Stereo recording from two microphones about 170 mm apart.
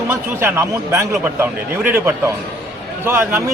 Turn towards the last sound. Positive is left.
turn(degrees=-15)  # may be behind; listen again after turning